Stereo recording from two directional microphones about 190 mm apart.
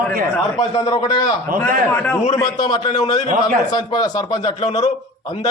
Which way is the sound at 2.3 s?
20° left (ahead or behind).